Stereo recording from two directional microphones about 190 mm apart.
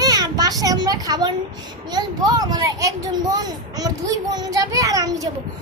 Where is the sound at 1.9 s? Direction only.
20° right (ahead or behind).